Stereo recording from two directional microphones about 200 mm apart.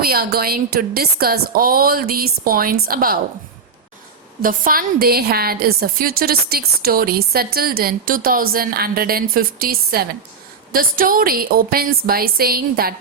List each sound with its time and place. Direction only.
0.0 s a woman's voice: 50° right (ahead or behind)
4.4 s a woman's voice: 45° right (ahead or behind)